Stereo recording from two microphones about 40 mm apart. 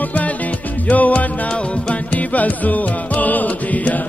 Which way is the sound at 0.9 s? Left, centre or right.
Left.